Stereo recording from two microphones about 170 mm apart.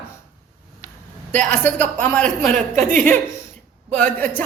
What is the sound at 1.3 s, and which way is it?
A woman's voice, 10° left (ahead or behind).